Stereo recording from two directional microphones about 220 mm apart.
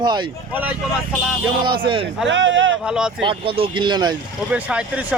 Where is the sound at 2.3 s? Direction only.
55° right (ahead or behind).